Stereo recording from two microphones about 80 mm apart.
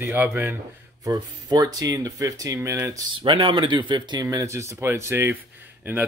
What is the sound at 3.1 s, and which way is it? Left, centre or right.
Speech, right.